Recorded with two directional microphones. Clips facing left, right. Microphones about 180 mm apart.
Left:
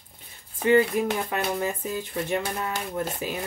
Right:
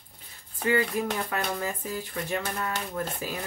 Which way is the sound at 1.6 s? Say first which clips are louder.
Left 4 dB; 20° left (ahead or behind).